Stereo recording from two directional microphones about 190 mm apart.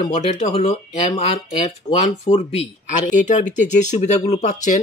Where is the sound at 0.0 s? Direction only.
35° left (ahead or behind).